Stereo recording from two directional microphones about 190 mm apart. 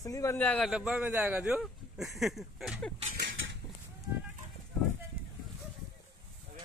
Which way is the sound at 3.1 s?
70° right (ahead or behind).